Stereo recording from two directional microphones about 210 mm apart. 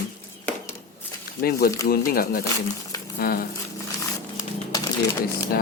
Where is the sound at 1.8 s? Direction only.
45° left (ahead or behind).